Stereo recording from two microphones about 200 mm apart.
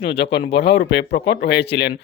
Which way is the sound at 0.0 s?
55° left (ahead or behind).